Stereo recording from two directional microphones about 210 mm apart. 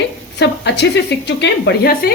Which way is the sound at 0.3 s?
55° left (ahead or behind).